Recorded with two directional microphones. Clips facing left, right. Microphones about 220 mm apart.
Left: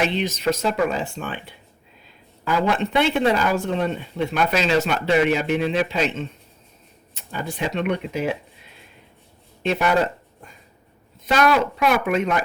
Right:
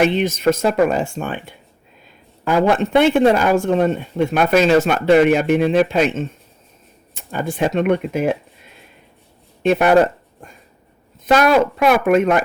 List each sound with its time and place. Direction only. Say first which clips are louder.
0.0 s speech: right 6 dB; 50° right (ahead or behind)
9.6 s speech: right 7 dB; 55° right (ahead or behind)